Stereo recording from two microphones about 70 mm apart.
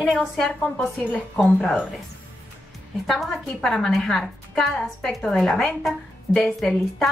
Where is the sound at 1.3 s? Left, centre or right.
Centre.